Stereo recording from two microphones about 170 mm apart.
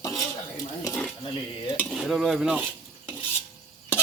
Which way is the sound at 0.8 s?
15° left (ahead or behind).